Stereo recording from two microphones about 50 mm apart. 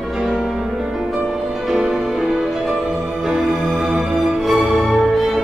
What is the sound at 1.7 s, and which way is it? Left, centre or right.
Music, centre.